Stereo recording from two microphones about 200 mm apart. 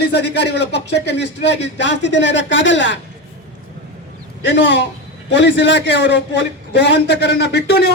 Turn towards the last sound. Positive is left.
turn(degrees=55)  # may be behind; listen again after turning